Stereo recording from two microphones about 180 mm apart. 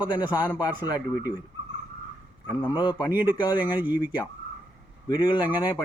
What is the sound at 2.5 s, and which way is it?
Speech, 25° left (ahead or behind).